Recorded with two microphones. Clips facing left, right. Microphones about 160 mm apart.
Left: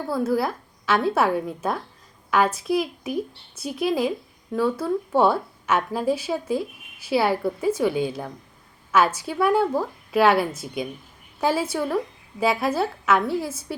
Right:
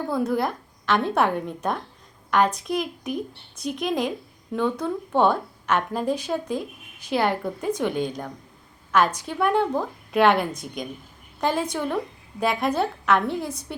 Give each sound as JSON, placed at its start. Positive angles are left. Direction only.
{"t": 0.1, "sound": "a woman's voice", "side_deg": 5}